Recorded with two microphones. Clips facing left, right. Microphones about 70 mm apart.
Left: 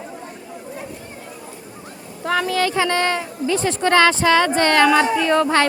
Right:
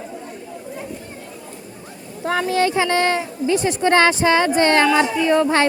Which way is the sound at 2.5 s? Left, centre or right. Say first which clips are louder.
Right 4 dB; right.